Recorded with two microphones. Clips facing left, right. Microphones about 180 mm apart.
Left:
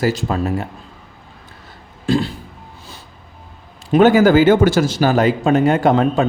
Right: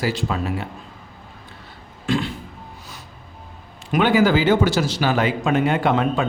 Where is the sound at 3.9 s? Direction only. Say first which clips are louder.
Left 6 dB; 40° left (ahead or behind).